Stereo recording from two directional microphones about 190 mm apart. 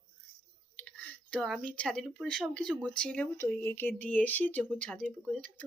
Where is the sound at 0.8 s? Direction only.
5° left (ahead or behind).